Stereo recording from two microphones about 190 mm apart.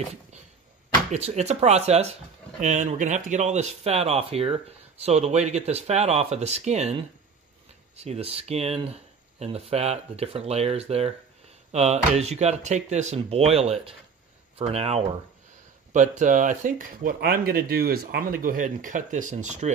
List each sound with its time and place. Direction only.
1.1 s speech: 35° right (ahead or behind)